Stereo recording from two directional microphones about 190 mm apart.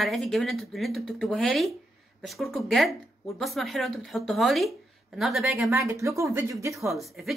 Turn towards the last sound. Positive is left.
turn(degrees=0)  # may be behind; listen again after turning